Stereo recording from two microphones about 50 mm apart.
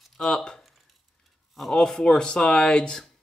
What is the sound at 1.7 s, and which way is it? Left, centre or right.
Speech, centre.